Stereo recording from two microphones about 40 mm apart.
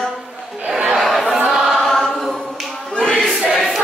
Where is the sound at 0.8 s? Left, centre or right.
Centre.